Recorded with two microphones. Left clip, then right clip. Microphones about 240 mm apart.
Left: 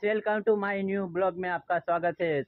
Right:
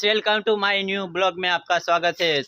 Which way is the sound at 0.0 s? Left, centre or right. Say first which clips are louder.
Right 7 dB; centre.